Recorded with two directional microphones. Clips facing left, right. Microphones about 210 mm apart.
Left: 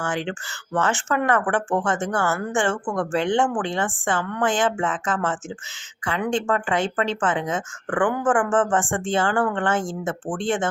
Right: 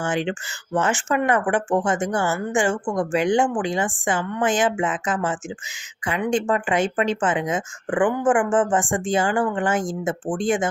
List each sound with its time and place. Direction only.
0.0 s speech: 20° right (ahead or behind)